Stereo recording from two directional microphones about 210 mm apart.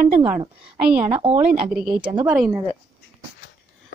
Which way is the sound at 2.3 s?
5° right (ahead or behind).